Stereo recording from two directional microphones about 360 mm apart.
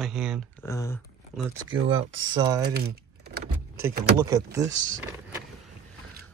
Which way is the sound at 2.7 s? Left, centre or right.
Right.